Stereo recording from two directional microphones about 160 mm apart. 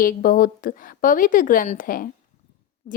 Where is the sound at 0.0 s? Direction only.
60° left (ahead or behind).